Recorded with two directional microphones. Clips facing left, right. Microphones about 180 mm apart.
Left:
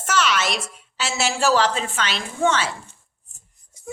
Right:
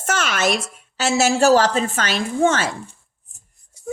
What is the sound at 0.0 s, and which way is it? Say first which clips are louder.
A woman's voice: right 1 dB; 45° right (ahead or behind).